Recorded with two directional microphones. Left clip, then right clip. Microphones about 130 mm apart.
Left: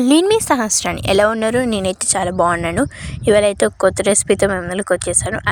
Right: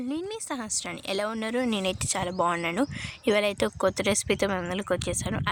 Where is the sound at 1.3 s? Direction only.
55° left (ahead or behind).